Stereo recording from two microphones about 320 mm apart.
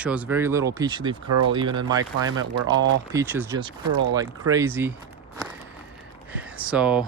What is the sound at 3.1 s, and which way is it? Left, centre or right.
Speech, centre.